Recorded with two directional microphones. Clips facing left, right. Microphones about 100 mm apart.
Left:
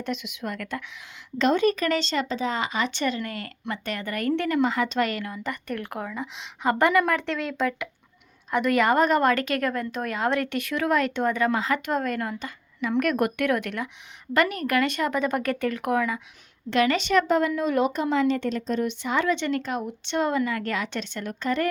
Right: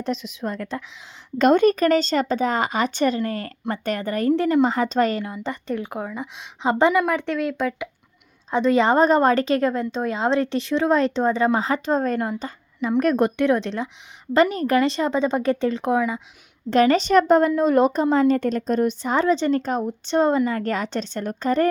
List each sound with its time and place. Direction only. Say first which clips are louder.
0.0 s speech: right 4 dB; 35° right (ahead or behind)
1.4 s a woman's voice: right 6 dB; 50° right (ahead or behind); by 7.9 s 15° right (ahead or behind)
8.4 s a woman's voice: right 3 dB; 25° right (ahead or behind)
16.6 s speech: right 5 dB; 40° right (ahead or behind)